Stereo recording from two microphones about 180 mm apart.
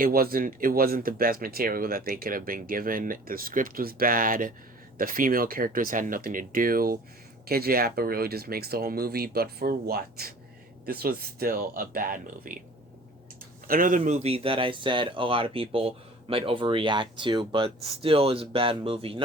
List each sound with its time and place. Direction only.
0.0 s speech: 55° right (ahead or behind)
13.7 s speech: 50° right (ahead or behind); by 19.2 s 30° right (ahead or behind)